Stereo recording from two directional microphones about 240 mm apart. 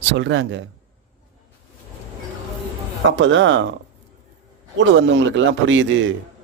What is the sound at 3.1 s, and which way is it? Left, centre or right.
Speech, right.